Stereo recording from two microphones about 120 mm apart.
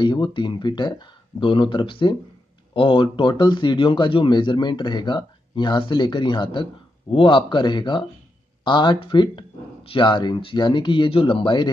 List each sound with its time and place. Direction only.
0.0 s speech: 40° left (ahead or behind)